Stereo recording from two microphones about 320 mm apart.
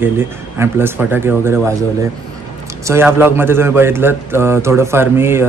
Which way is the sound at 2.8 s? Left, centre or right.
Centre.